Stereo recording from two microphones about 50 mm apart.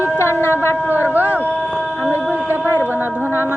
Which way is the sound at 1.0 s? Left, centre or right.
Right.